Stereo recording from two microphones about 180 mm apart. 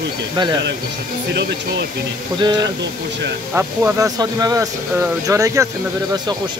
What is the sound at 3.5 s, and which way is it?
Speech, 15° right (ahead or behind).